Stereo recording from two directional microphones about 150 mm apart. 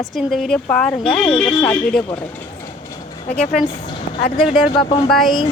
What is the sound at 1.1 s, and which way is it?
Speech, 35° left (ahead or behind).